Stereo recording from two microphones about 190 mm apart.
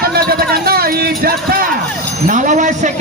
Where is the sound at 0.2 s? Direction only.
55° right (ahead or behind).